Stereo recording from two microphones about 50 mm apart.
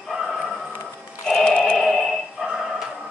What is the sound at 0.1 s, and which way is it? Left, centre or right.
Music, centre.